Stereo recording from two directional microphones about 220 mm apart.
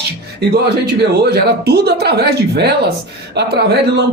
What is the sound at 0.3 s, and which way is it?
Speech, 50° right (ahead or behind).